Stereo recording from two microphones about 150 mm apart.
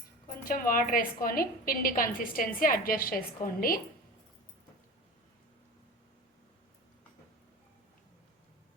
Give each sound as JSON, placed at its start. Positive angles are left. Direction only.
{"t": 0.3, "sound": "a woman's voice", "side_deg": 65}